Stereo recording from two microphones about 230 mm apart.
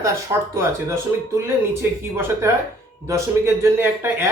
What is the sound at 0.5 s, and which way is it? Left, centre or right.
Speech, centre.